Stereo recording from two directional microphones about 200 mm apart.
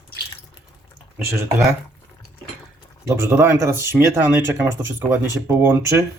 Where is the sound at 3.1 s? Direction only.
15° right (ahead or behind).